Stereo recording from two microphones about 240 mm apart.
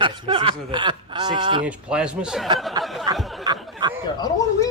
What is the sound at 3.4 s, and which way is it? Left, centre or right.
Snicker, centre.